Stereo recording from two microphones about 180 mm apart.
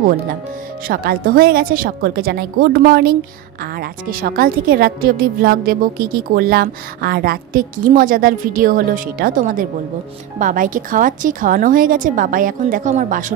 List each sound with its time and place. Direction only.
0.8 s a woman's voice: 55° right (ahead or behind)